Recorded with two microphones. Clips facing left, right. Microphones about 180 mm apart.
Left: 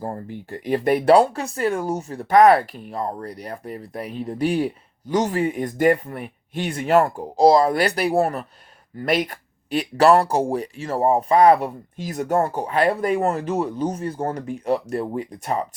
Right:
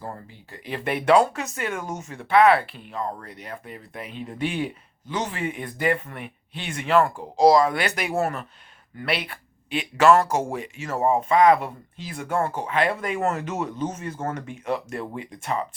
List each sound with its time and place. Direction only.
0.3 s speech: 50° left (ahead or behind)